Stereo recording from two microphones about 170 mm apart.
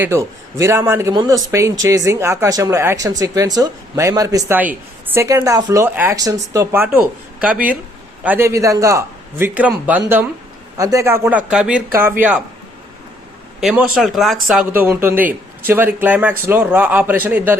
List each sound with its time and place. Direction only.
0.0 s speech: 15° right (ahead or behind)
13.6 s speech: centre (ahead or behind)